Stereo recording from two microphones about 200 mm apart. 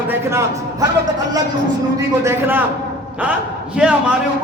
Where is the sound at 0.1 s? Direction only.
15° right (ahead or behind).